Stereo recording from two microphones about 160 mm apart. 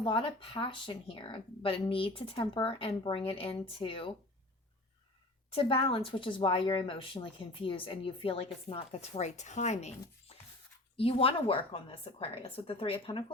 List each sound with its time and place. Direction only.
0.0 s speech: 30° left (ahead or behind)
5.5 s speech: 35° left (ahead or behind)
10.9 s speech: 35° left (ahead or behind)